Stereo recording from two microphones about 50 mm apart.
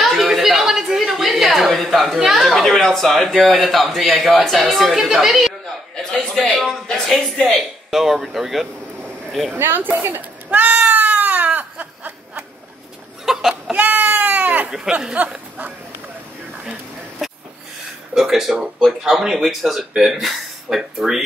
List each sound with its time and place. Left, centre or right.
0.2 s a sound: centre
2.4 s speech: centre
6.1 s speech: centre
7.9 s speech: centre
9.6 s cat: right
13.2 s a sound: centre
13.7 s speech: right
14.7 s speech: centre
15.1 s speech: right
18.1 s speech: centre